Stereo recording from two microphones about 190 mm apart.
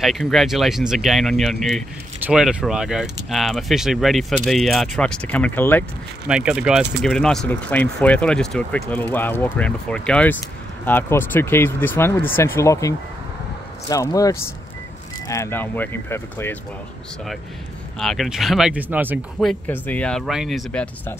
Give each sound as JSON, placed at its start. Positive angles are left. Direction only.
{"t": 0.0, "sound": "speech", "side_deg": 0}
{"t": 6.2, "sound": "speech", "side_deg": -5}
{"t": 17.9, "sound": "speech", "side_deg": 0}
{"t": 19.4, "sound": "speech", "side_deg": 10}